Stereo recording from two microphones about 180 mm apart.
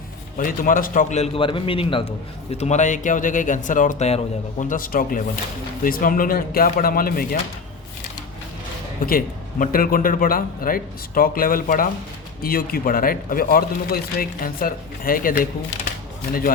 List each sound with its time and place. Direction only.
0.3 s a man's voice: 50° left (ahead or behind)
9.0 s speech: 55° left (ahead or behind)